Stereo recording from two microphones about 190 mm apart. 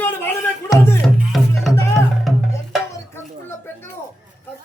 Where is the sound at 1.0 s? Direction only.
Centre (ahead or behind).